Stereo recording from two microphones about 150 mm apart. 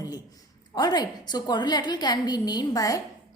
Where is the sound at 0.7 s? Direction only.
30° left (ahead or behind).